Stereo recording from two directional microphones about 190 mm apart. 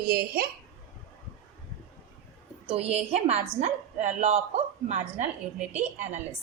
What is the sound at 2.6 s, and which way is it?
A woman's voice, 30° right (ahead or behind).